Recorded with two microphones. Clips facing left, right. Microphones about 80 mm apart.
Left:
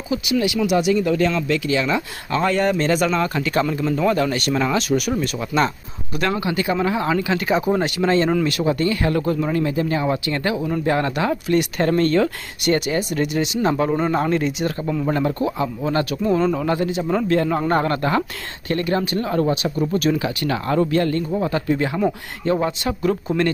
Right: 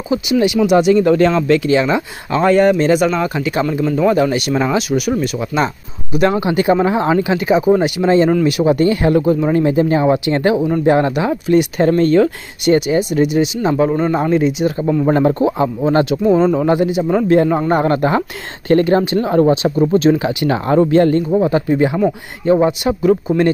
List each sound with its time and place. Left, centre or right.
0.1 s speech: right; by 4.1 s centre
4.1 s speech: centre
6.1 s speech: right
7.3 s speech: centre
8.6 s speech: right
11.4 s speech: centre
14.8 s speech: centre
15.0 s speech: right
16.2 s speech: centre
17.3 s speech: centre
18.7 s speech: right; by 23.4 s centre